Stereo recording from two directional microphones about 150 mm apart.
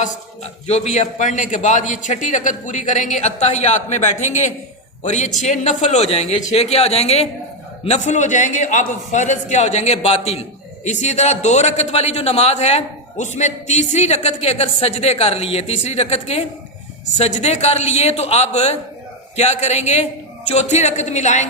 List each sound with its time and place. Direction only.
0.0 s a man's voice: 50° left (ahead or behind)